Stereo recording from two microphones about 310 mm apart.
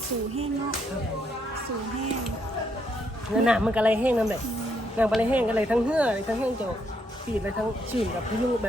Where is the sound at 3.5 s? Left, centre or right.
Centre.